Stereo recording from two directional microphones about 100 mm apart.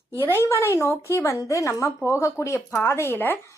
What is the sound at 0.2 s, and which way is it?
A woman's voice, 25° left (ahead or behind).